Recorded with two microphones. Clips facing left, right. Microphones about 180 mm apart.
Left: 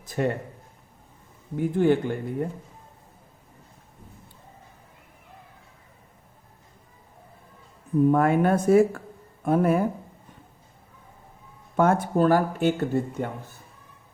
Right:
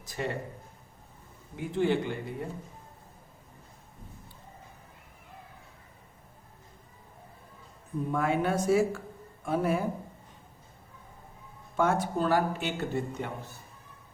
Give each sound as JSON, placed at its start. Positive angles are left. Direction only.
{"t": 0.0, "sound": "speech", "side_deg": 55}
{"t": 1.5, "sound": "speech", "side_deg": 50}
{"t": 8.1, "sound": "speech", "side_deg": 55}
{"t": 11.8, "sound": "speech", "side_deg": 55}